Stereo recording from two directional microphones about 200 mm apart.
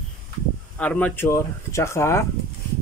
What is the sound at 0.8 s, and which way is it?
Speech, 5° left (ahead or behind).